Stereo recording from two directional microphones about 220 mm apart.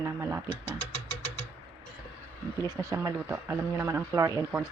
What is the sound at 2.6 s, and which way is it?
Speech, 15° right (ahead or behind).